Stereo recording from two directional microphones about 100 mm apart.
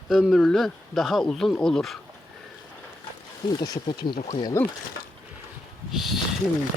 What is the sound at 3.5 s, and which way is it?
Speech, 40° left (ahead or behind).